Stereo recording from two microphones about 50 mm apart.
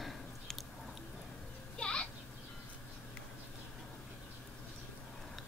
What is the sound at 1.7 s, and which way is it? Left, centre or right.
Children playing, centre.